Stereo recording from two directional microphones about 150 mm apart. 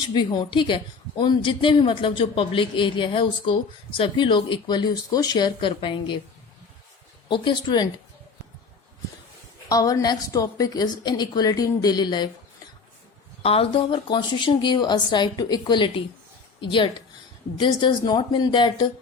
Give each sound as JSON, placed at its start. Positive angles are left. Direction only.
{"t": 0.0, "sound": "a woman's voice", "side_deg": 30}
{"t": 7.3, "sound": "a woman's voice", "side_deg": 30}
{"t": 9.6, "sound": "a woman's voice", "side_deg": 25}
{"t": 13.4, "sound": "a woman's voice", "side_deg": 40}